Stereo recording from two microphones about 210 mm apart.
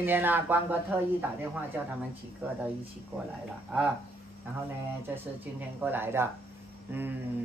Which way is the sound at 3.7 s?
5° right (ahead or behind).